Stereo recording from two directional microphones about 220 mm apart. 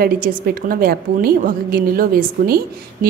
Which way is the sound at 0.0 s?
40° right (ahead or behind).